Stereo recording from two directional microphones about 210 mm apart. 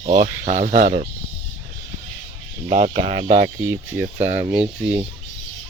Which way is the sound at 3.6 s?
10° right (ahead or behind).